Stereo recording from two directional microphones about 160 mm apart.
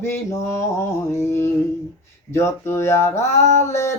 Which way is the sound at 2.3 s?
15° left (ahead or behind).